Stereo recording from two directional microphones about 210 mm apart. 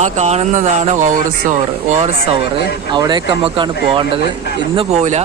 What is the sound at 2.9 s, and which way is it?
Speech, 20° right (ahead or behind).